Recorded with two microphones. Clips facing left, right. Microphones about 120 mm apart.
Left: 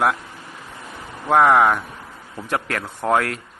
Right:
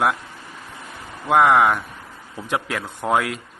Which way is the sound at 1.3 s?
Centre (ahead or behind).